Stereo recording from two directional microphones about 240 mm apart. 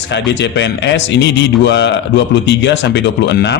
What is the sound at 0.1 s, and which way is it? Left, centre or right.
A man's voice, left.